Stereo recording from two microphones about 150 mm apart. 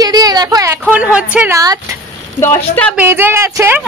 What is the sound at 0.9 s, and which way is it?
Speech, 5° right (ahead or behind).